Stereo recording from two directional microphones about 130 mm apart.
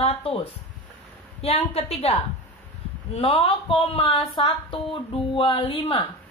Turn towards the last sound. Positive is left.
turn(degrees=40)  # may be behind; listen again after turning